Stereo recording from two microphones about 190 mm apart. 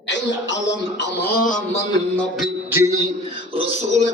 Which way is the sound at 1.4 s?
40° left (ahead or behind).